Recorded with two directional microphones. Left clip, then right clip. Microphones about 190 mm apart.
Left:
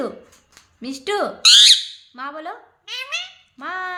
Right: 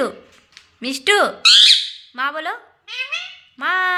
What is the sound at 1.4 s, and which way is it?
Speech, 35° left (ahead or behind).